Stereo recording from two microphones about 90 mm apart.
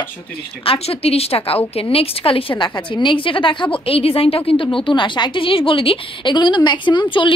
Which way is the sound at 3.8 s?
90° left.